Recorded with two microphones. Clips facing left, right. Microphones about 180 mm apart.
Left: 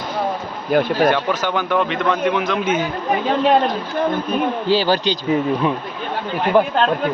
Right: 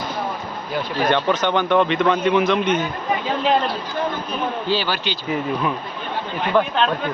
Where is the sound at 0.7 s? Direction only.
55° left (ahead or behind).